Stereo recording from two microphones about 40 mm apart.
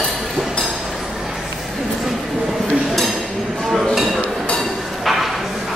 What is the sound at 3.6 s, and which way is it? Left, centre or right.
Chink, centre.